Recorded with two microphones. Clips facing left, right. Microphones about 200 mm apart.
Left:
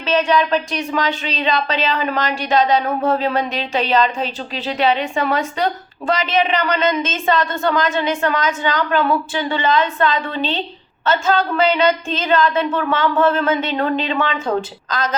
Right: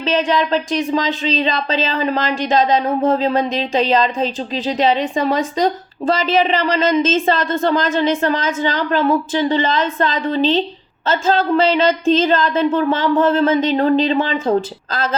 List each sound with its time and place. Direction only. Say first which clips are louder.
0.0 s speech: even; 30° right (ahead or behind)